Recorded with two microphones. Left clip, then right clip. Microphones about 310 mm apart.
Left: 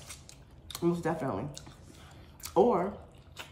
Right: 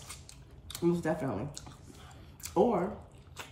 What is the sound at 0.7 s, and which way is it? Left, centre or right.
Laughter, centre.